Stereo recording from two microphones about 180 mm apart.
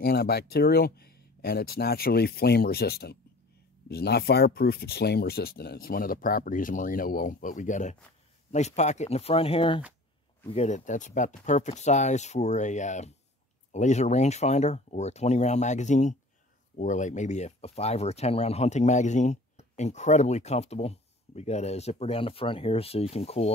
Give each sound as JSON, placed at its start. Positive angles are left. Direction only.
{"t": 0.0, "sound": "speech", "side_deg": 60}